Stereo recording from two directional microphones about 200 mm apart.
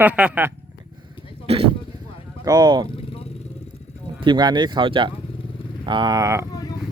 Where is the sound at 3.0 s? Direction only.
30° left (ahead or behind).